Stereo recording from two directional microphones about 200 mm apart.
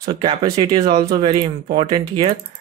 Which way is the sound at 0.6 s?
20° right (ahead or behind).